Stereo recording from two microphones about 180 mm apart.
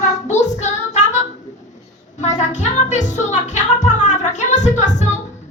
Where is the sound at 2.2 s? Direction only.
40° left (ahead or behind).